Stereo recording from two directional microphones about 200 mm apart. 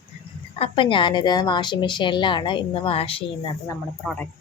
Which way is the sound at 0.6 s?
25° left (ahead or behind).